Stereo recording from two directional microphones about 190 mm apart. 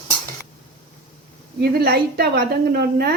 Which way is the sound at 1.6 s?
55° right (ahead or behind).